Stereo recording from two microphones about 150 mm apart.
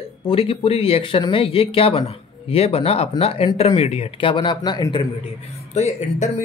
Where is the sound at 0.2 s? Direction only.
40° left (ahead or behind).